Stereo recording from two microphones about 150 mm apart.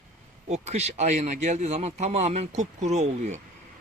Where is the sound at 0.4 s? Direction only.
45° right (ahead or behind).